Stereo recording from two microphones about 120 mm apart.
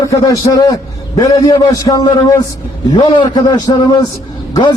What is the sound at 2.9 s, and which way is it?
A man's voice, 45° left (ahead or behind).